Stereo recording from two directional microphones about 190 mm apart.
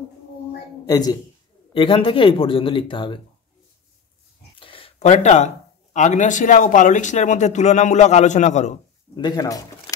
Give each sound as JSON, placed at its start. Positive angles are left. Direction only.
{"t": 0.8, "sound": "a man's voice", "side_deg": 20}
{"t": 4.6, "sound": "a sound", "side_deg": 30}
{"t": 5.9, "sound": "speech", "side_deg": 40}
{"t": 9.1, "sound": "a man's voice", "side_deg": 20}